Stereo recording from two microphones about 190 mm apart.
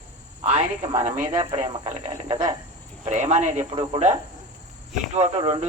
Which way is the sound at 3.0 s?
40° right (ahead or behind).